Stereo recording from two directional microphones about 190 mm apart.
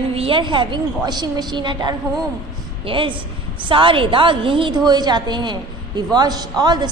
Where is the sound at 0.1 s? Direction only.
30° right (ahead or behind).